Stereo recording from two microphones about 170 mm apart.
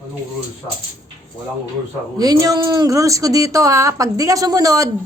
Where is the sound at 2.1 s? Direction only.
20° right (ahead or behind).